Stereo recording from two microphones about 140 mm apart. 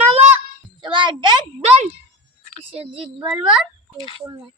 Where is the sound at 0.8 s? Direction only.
35° right (ahead or behind).